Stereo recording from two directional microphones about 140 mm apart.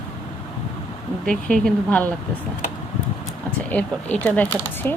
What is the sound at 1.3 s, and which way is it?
Speech, 5° left (ahead or behind).